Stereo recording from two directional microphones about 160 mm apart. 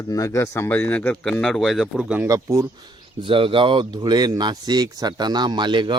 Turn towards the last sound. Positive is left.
turn(degrees=-30)  # may be behind; listen again after turning